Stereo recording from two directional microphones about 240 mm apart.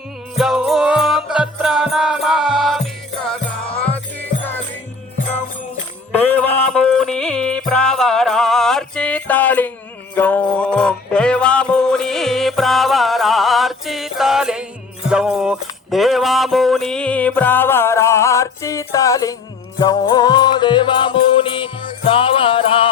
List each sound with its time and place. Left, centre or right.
0.3 s music: centre
6.1 s music: centre; by 22.9 s left